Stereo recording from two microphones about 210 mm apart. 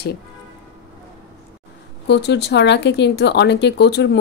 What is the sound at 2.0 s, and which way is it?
Speech, 55° left (ahead or behind).